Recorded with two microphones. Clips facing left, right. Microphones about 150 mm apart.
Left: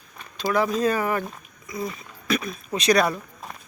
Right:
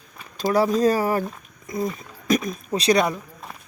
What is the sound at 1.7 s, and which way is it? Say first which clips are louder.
Speech: right 4 dB; 50° right (ahead or behind).